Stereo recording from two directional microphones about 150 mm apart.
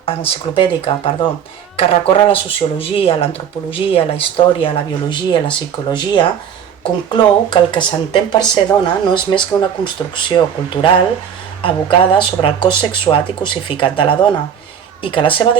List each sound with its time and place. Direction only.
0.0 s speech: 40° left (ahead or behind)
11.6 s speech: 35° left (ahead or behind)